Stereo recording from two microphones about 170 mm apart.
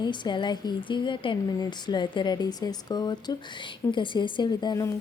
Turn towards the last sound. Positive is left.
turn(degrees=20)  # may be behind; listen again after turning